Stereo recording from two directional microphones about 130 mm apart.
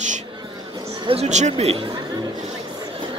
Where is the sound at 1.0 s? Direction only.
45° right (ahead or behind).